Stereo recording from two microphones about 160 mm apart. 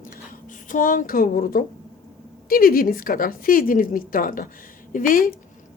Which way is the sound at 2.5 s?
65° left (ahead or behind).